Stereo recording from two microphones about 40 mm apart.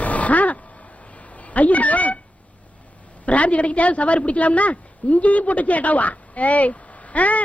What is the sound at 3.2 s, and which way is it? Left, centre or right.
A woman's voice, left.